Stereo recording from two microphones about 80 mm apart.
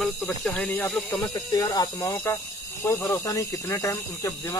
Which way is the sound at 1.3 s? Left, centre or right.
Left.